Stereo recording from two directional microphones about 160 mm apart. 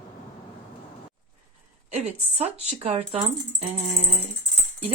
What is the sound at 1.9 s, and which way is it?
A woman's voice, 45° right (ahead or behind).